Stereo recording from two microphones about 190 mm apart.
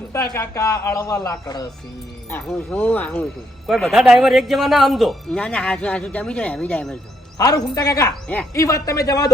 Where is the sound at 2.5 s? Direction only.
10° left (ahead or behind).